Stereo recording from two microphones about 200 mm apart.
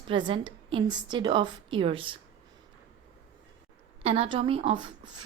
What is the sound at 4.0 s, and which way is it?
A woman's voice, 30° right (ahead or behind).